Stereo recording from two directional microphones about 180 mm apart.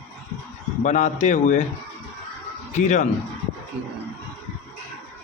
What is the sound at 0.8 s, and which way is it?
Speech, 40° left (ahead or behind).